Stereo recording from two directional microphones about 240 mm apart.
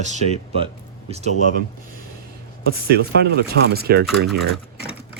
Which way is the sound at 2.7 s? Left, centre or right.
Right.